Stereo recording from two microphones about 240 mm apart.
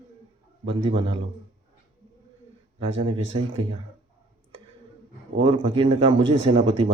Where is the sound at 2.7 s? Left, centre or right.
Right.